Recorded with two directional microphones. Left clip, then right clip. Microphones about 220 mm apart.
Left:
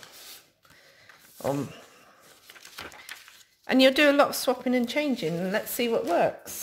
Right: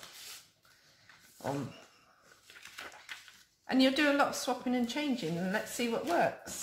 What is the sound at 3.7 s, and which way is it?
Speech, 45° left (ahead or behind).